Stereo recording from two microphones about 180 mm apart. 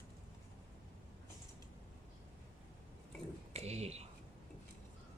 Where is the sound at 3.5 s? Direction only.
35° right (ahead or behind).